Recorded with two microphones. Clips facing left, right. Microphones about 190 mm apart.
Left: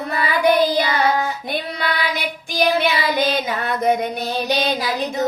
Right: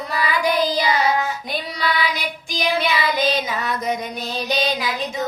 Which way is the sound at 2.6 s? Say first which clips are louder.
Left 3 dB; 55° left (ahead or behind).